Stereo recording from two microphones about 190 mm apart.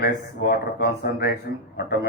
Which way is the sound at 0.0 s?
55° left (ahead or behind).